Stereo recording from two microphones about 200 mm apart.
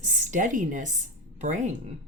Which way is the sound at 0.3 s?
40° right (ahead or behind).